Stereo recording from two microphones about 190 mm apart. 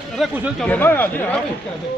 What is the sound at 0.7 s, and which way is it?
Speech, 10° left (ahead or behind).